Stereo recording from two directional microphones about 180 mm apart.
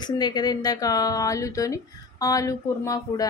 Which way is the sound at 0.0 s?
25° left (ahead or behind).